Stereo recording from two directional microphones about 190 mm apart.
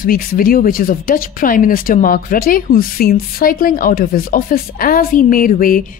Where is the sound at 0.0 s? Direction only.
50° left (ahead or behind).